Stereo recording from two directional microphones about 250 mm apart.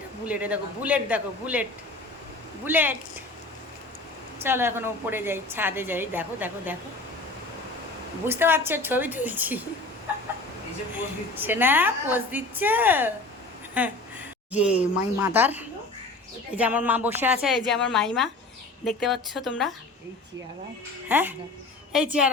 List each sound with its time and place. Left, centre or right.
0.3 s a woman's voice: centre
2.6 s a woman's voice: centre
4.4 s a woman's voice: centre
8.3 s a woman's voice: centre
10.9 s a woman's voice: centre
21.1 s a woman's voice: centre